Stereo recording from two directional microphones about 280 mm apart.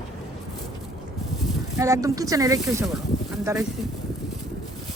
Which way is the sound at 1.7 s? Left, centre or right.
Centre.